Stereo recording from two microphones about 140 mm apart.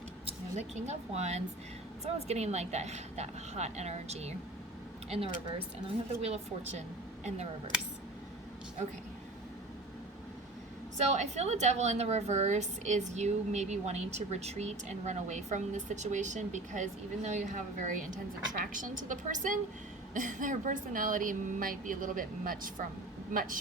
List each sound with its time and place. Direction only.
0.5 s speech: 55° right (ahead or behind)
11.1 s a woman's voice: 55° right (ahead or behind)
18.5 s speech: 75° right (ahead or behind)